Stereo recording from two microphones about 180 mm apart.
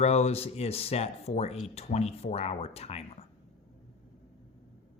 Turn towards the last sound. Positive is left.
turn(degrees=35)  # may be behind; listen again after turning